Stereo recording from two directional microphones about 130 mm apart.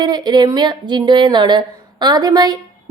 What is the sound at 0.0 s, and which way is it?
Speech, 35° right (ahead or behind).